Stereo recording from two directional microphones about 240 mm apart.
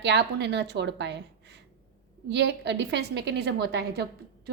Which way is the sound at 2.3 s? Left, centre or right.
Right.